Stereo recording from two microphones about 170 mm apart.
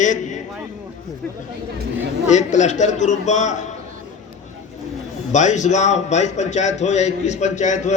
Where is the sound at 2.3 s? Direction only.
45° left (ahead or behind).